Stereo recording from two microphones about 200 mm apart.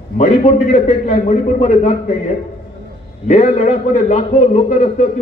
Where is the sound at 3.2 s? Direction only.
35° left (ahead or behind).